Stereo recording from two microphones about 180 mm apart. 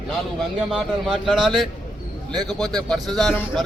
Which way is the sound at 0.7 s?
Centre (ahead or behind).